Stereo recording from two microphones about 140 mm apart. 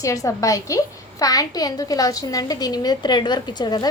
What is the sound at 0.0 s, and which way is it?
A woman's voice, 25° left (ahead or behind).